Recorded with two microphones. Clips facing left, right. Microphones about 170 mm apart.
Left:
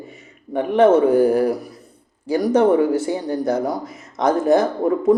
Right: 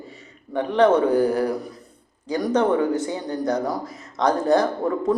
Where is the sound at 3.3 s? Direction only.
25° left (ahead or behind).